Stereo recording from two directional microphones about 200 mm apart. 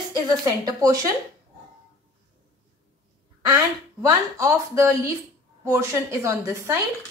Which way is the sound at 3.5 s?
15° right (ahead or behind).